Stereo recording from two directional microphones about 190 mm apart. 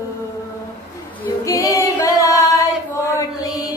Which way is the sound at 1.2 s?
15° left (ahead or behind).